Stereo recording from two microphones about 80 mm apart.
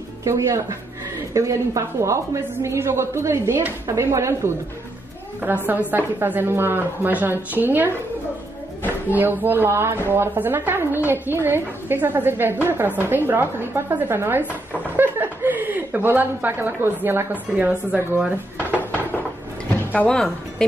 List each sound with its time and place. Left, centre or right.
0.2 s a woman's voice: right
5.7 s speech: right
9.1 s speech: right
19.7 s drawer open or close: left